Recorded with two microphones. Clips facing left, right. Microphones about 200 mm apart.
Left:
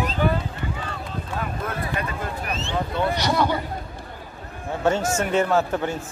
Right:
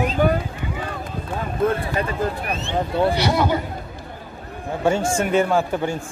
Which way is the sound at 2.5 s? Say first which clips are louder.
Right 2 dB; 55° right (ahead or behind).